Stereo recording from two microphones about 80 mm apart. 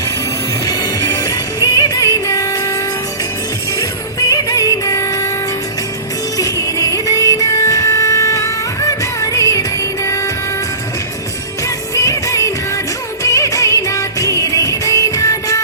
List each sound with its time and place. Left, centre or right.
0.6 s music: left
4.3 s music: left
6.3 s music: left
11.6 s music: left